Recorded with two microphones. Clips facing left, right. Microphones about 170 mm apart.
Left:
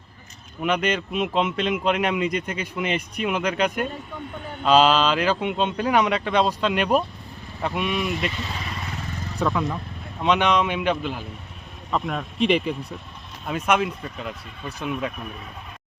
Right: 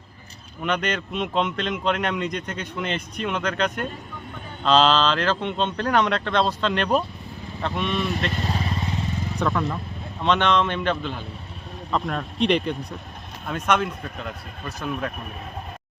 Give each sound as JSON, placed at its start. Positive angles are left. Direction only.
{"t": 0.6, "sound": "speech", "side_deg": 5}
{"t": 8.3, "sound": "speech", "side_deg": -50}
{"t": 9.4, "sound": "speech", "side_deg": 5}